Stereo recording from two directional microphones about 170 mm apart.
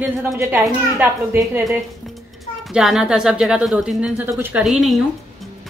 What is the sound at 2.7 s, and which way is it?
A woman's voice, 5° right (ahead or behind).